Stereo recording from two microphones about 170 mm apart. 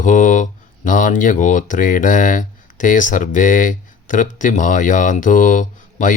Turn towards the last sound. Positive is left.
turn(degrees=50)  # may be behind; listen again after turning